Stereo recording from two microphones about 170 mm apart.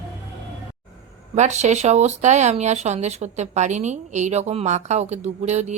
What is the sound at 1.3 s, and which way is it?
Speech, 40° right (ahead or behind).